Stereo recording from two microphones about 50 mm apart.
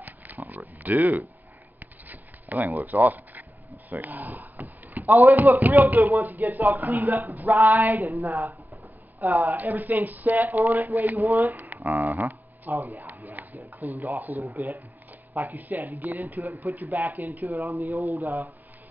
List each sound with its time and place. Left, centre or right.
0.8 s speech: right
1.8 s a sound: right
3.9 s speech: right
11.6 s shuffling cards: right
11.9 s speech: right
13.2 s a sound: right
13.7 s speech: right